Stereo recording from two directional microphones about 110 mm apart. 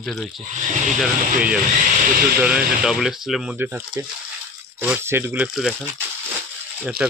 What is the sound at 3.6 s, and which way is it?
Speech, 20° right (ahead or behind).